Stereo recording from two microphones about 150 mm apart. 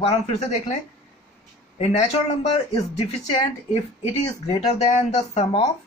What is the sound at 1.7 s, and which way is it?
Speech, 45° left (ahead or behind).